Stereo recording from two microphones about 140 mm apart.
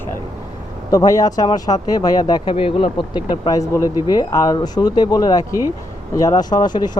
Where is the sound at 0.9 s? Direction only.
25° left (ahead or behind).